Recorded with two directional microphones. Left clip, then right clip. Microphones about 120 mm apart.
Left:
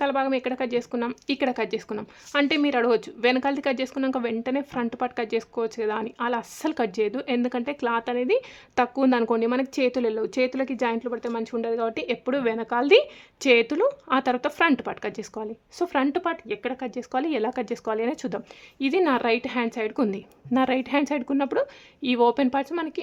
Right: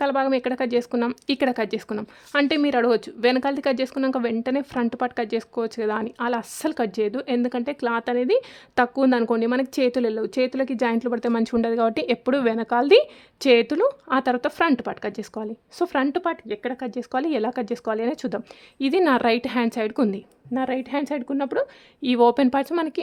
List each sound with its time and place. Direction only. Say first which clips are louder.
0.0 s speech: right 2 dB; 25° right (ahead or behind)
10.9 s speech: right 5 dB; 55° right (ahead or behind); by 20.1 s 35° right (ahead or behind)
20.5 s a woman's voice: left 2 dB; centre (ahead or behind)
22.0 s speech: right 3 dB; 25° right (ahead or behind)